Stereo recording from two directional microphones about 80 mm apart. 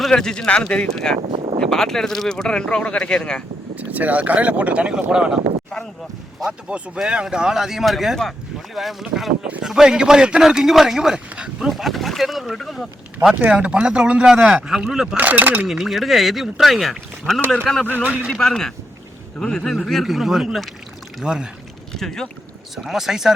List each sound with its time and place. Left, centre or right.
0.1 s speech: centre
3.8 s a man's voice: centre
6.4 s a man's voice: centre
13.4 s a man's voice: centre
15.1 s speech: right
15.6 s speech: centre
18.0 s speech: centre
18.3 s a man's voice: centre
21.9 s speech: centre